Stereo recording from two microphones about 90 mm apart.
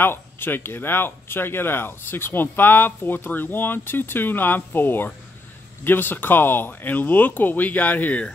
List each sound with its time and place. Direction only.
0.0 s speech: 25° left (ahead or behind)